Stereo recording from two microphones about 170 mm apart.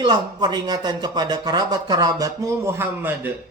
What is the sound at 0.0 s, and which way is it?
A man's voice, 25° right (ahead or behind).